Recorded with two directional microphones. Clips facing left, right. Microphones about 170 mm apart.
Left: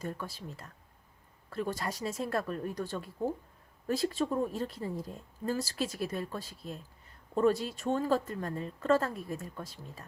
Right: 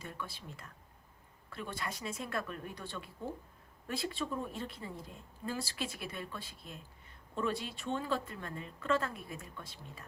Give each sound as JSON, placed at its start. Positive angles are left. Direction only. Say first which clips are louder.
{"t": 0.0, "sound": "a woman's voice", "louder": "left 6 dB", "side_deg": 40}